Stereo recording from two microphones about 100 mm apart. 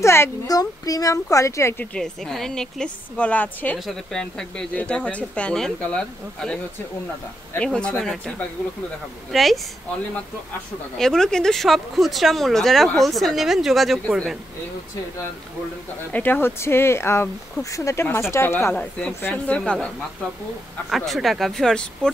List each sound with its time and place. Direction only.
0.0 s a sound: 25° left (ahead or behind)
0.5 s speech: 40° left (ahead or behind)
2.0 s speech: 5° left (ahead or behind)
3.7 s speech: 5° left (ahead or behind)
11.0 s speech: 5° left (ahead or behind)
16.1 s speech: 20° left (ahead or behind)
18.8 s speech: 10° left (ahead or behind)
20.9 s speech: centre (ahead or behind)